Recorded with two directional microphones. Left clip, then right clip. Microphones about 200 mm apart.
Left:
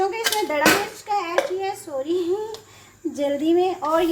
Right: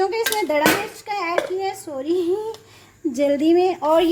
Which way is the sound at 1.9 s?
70° right (ahead or behind).